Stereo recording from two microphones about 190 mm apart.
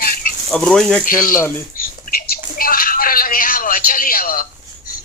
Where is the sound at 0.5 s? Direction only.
5° left (ahead or behind).